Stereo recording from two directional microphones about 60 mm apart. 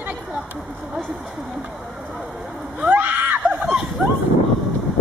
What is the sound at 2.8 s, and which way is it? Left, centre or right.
Screaming, right.